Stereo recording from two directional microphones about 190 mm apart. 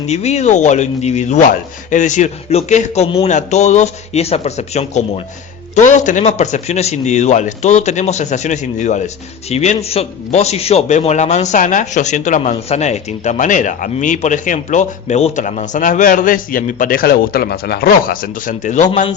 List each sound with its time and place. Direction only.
0.1 s speech: 35° left (ahead or behind)